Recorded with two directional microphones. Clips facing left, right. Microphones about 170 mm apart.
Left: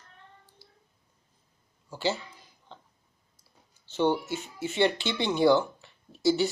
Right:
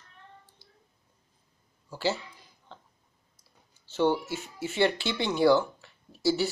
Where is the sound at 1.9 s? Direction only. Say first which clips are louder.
Even; 5° right (ahead or behind).